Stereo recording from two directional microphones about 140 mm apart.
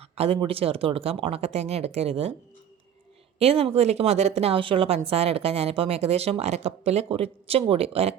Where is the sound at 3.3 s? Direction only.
45° right (ahead or behind).